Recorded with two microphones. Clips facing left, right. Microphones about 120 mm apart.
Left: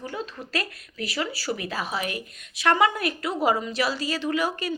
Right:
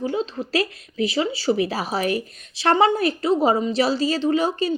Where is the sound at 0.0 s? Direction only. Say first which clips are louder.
Right 9 dB; 20° right (ahead or behind).